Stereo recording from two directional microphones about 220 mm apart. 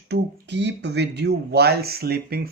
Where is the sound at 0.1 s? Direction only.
50° right (ahead or behind).